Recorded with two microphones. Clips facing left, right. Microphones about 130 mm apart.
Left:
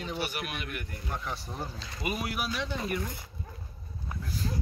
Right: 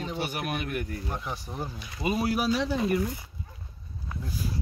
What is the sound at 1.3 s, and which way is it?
Speech, 15° right (ahead or behind).